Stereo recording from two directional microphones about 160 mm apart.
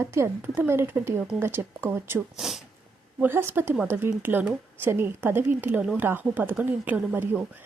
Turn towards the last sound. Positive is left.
turn(degrees=-10)  # may be behind; listen again after turning